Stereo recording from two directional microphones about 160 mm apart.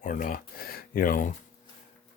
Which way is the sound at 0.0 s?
55° left (ahead or behind).